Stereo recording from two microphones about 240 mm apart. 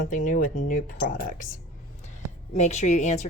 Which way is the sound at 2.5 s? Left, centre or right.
Left.